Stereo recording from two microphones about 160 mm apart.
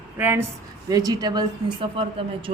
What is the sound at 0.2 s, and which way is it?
A woman's voice, 15° right (ahead or behind).